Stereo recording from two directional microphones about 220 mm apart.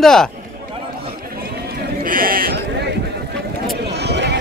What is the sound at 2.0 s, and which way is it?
Sheep, 40° right (ahead or behind).